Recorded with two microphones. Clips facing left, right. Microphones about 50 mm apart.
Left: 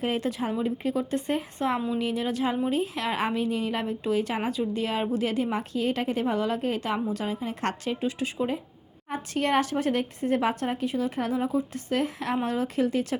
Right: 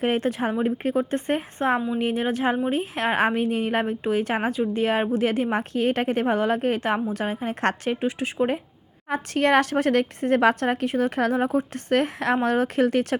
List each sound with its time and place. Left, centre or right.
0.0 s a woman's voice: right
9.0 s a woman's voice: right